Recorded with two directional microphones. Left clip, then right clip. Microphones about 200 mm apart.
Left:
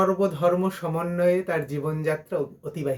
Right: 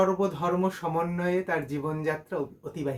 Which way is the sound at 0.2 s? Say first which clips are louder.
Left 5 dB; 5° right (ahead or behind).